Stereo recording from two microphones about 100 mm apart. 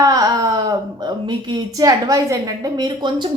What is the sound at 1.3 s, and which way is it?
A woman's voice, 45° right (ahead or behind).